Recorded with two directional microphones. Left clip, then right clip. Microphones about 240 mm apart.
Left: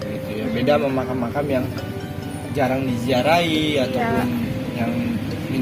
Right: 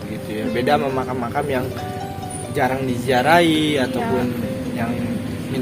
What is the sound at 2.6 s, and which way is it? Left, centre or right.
A man's voice, right.